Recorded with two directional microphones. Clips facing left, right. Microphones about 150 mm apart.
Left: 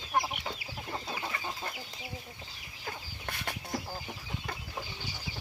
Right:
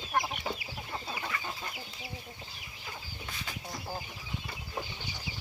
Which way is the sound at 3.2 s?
60° left (ahead or behind).